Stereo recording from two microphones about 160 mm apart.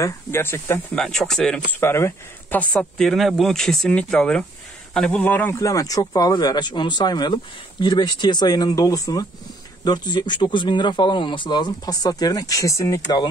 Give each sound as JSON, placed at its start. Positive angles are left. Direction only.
{"t": 0.0, "sound": "speech", "side_deg": 15}
{"t": 0.9, "sound": "speech", "side_deg": 5}